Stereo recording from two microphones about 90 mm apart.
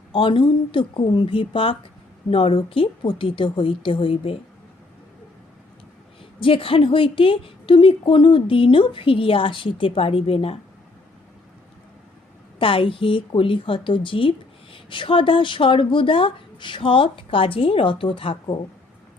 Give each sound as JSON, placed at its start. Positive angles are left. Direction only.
{"t": 0.1, "sound": "a woman's voice", "side_deg": 70}
{"t": 6.4, "sound": "a woman's voice", "side_deg": 85}
{"t": 12.5, "sound": "a woman's voice", "side_deg": 80}